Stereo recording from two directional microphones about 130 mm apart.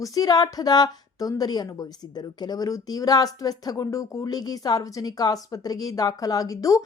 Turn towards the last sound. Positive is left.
turn(degrees=25)  # may be behind; listen again after turning